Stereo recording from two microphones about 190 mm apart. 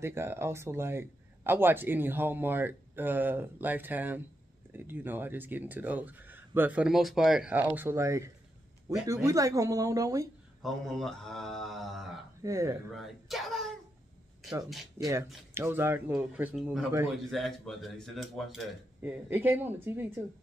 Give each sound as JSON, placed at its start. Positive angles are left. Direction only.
{"t": 0.0, "sound": "speech", "side_deg": -15}
{"t": 10.6, "sound": "speech", "side_deg": 0}
{"t": 12.4, "sound": "speech", "side_deg": -15}
{"t": 12.9, "sound": "speech", "side_deg": 0}
{"t": 14.7, "sound": "speech", "side_deg": 0}
{"t": 15.5, "sound": "speech", "side_deg": -10}
{"t": 18.9, "sound": "speech", "side_deg": -10}